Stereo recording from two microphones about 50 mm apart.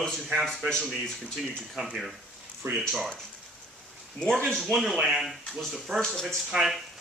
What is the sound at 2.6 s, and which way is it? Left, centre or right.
Speech, right.